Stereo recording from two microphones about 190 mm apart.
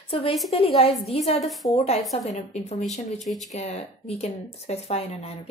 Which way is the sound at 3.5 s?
35° left (ahead or behind).